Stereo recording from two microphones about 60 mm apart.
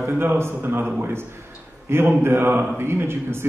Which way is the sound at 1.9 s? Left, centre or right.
Right.